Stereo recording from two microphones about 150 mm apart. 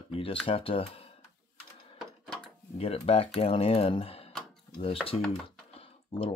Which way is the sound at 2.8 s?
40° left (ahead or behind).